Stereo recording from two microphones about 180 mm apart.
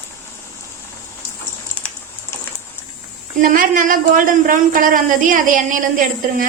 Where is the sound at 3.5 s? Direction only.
45° right (ahead or behind).